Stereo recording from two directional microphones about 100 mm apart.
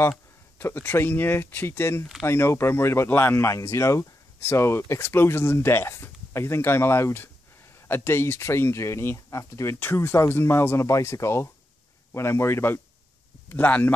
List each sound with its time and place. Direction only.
0.6 s a man's voice: 20° left (ahead or behind)